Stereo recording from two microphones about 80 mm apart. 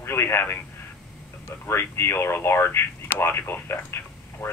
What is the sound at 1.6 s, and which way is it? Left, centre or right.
Speech, left.